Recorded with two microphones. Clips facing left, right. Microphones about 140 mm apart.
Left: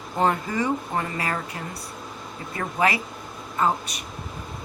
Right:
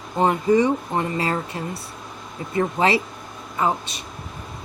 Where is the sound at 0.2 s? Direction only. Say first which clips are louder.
Right 6 dB; 20° right (ahead or behind).